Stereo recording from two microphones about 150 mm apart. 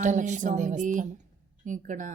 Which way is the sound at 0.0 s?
55° right (ahead or behind).